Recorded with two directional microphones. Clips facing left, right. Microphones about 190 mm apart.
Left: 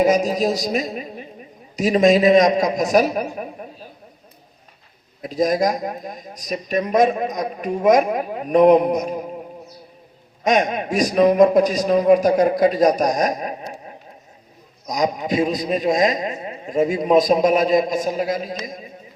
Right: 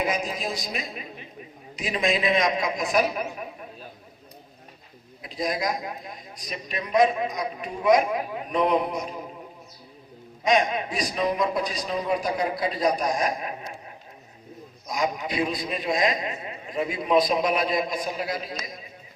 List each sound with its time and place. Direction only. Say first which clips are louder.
0.0 s a man's voice: left 11 dB; 40° left (ahead or behind)
5.2 s a man's voice: left 9 dB; 45° left (ahead or behind)
10.4 s a man's voice: left 4 dB; 45° left (ahead or behind)
14.8 s a man's voice: left 6 dB; 40° left (ahead or behind)